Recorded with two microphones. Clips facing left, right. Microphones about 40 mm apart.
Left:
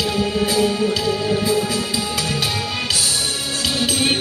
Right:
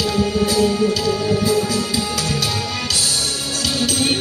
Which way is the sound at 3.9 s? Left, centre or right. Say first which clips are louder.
Left 1 dB; left.